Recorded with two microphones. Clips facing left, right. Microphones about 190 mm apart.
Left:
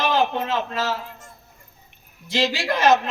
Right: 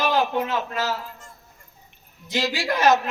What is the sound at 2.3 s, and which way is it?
Speech, 20° left (ahead or behind).